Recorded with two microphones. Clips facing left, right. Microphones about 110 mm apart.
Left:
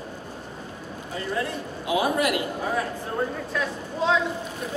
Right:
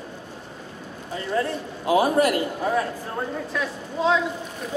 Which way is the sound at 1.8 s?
40° right (ahead or behind).